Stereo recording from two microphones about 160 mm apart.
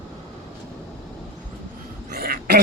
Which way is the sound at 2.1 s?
75° right (ahead or behind).